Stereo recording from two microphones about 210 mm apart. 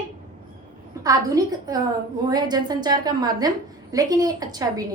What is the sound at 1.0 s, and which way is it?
A woman's voice, 15° right (ahead or behind).